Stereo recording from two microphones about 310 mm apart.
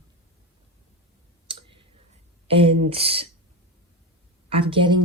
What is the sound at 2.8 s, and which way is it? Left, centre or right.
Speech, centre.